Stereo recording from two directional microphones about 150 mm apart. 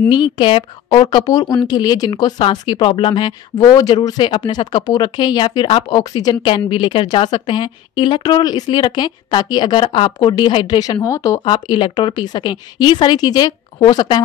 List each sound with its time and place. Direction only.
0.1 s a woman's voice: 35° left (ahead or behind)
1.0 s speech: 25° left (ahead or behind)
11.4 s a woman's voice: 35° left (ahead or behind)